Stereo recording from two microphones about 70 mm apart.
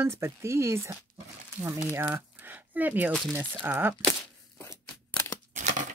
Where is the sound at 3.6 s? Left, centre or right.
Right.